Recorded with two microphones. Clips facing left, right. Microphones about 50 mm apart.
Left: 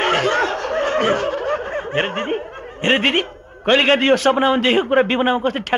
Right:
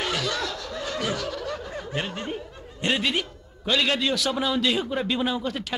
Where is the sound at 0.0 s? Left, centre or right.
Left.